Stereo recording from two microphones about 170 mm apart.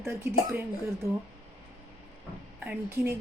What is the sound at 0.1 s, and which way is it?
Speech, 10° right (ahead or behind).